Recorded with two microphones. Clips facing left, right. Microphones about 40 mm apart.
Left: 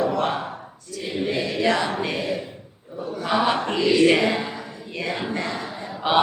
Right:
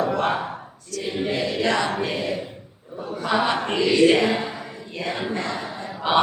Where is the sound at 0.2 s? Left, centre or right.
Centre.